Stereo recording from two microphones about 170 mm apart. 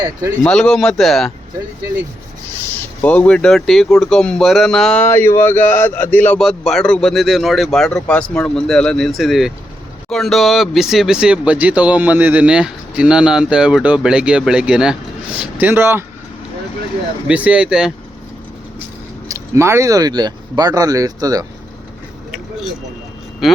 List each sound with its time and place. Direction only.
0.4 s speech: 5° left (ahead or behind)
3.0 s speech: 10° left (ahead or behind); by 16.0 s 15° right (ahead or behind)
17.2 s speech: 5° right (ahead or behind)
19.5 s speech: 15° right (ahead or behind)
23.4 s speech: centre (ahead or behind)